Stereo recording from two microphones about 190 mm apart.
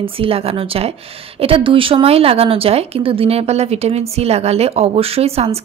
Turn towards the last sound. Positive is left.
turn(degrees=-30)  # may be behind; listen again after turning